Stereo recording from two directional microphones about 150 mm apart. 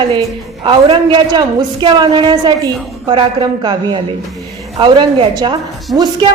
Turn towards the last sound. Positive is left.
turn(degrees=-10)  # may be behind; listen again after turning